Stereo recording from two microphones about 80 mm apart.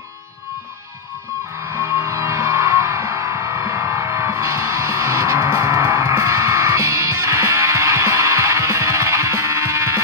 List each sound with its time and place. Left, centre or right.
1.7 s music: right